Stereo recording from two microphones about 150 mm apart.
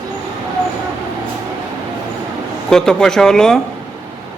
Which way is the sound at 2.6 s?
5° left (ahead or behind).